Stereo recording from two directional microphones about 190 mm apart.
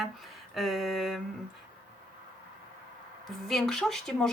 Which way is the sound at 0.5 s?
Centre (ahead or behind).